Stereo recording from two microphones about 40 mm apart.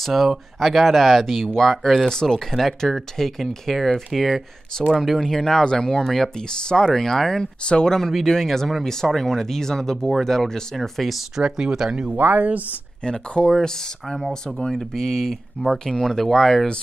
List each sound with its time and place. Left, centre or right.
0.0 s speech: centre
4.7 s speech: centre
5.0 s speech: centre
5.4 s speech: centre
6.0 s speech: centre
6.5 s speech: left
6.9 s speech: centre
11.3 s speech: centre
12.1 s speech: right
13.0 s speech: left; by 16.6 s centre